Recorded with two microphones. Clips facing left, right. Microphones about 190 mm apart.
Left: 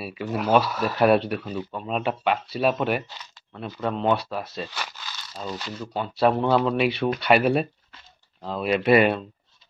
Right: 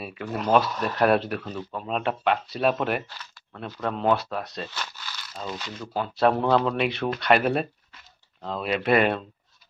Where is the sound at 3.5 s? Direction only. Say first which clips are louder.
Left 2 dB; 5° left (ahead or behind).